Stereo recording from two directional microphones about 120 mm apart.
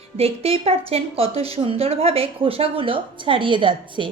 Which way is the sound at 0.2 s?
55° right (ahead or behind).